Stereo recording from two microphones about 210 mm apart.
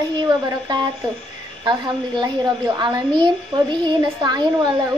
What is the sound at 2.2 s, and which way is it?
A woman's voice, 20° right (ahead or behind).